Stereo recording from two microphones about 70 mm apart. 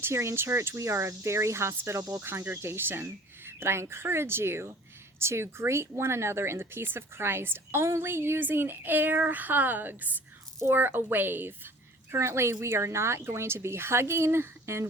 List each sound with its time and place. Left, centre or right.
0.0 s speech: right